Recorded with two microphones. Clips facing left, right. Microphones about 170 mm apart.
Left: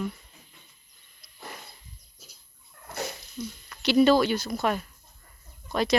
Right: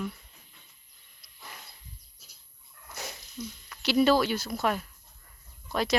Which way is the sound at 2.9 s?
60° left (ahead or behind).